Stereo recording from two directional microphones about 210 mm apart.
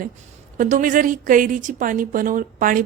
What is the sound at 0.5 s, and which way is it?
A woman's voice, 40° right (ahead or behind).